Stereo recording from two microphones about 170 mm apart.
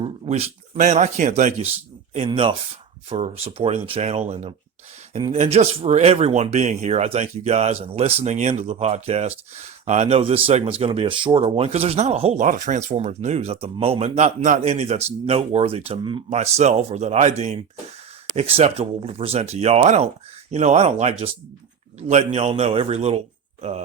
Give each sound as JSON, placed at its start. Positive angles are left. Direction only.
{"t": 0.0, "sound": "speech", "side_deg": -35}
{"t": 5.3, "sound": "speech", "side_deg": -40}